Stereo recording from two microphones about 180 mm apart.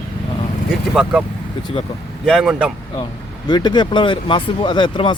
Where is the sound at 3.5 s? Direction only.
25° left (ahead or behind).